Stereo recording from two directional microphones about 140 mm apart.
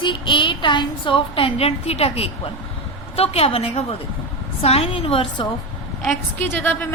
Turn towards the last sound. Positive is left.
turn(degrees=15)  # may be behind; listen again after turning